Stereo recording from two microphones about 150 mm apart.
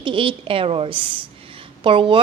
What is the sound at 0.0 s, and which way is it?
A woman's voice, 35° right (ahead or behind).